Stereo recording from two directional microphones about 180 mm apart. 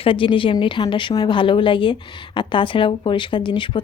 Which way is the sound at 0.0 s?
30° left (ahead or behind).